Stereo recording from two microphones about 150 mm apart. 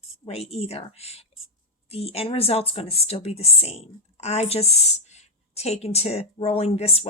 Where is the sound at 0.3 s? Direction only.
45° left (ahead or behind).